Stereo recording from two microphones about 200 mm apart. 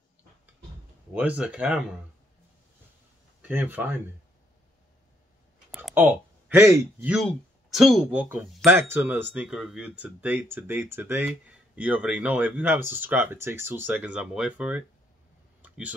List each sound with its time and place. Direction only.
1.1 s speech: 5° right (ahead or behind)
3.4 s speech: 10° right (ahead or behind)
5.7 s a sound: centre (ahead or behind)
5.9 s speech: 10° right (ahead or behind)
7.7 s speech: centre (ahead or behind)
15.6 s a sound: 5° right (ahead or behind)